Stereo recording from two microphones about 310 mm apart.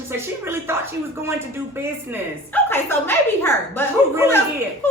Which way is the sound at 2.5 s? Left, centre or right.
Centre.